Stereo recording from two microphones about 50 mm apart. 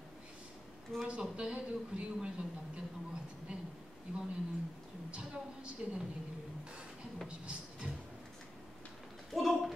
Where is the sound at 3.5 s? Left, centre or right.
Right.